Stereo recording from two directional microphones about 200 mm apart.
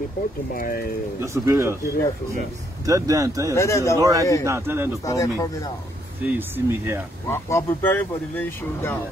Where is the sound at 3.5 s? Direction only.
15° left (ahead or behind).